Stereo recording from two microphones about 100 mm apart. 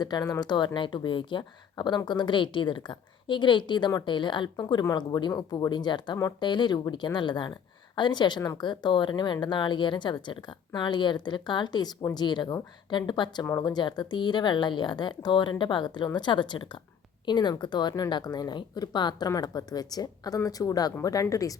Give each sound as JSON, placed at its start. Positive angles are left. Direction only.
{"t": 0.0, "sound": "a woman's voice", "side_deg": 40}